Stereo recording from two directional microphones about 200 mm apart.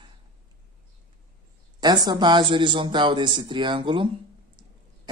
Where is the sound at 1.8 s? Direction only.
20° right (ahead or behind).